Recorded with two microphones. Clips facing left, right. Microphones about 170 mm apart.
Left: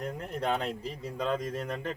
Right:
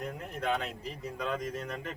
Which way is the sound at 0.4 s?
30° left (ahead or behind).